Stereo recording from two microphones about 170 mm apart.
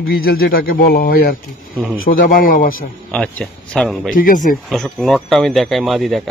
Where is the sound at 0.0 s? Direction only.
65° left (ahead or behind).